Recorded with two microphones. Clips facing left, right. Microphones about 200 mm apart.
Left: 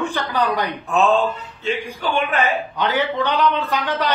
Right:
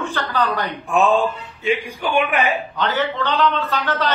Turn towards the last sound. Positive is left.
turn(degrees=15)  # may be behind; listen again after turning